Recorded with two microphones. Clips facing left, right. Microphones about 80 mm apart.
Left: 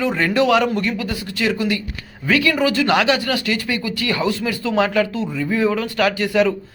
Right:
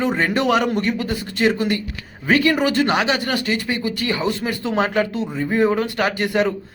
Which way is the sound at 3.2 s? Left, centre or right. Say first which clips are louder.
Even; right.